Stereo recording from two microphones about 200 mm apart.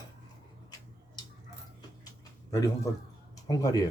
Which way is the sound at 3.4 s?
20° left (ahead or behind).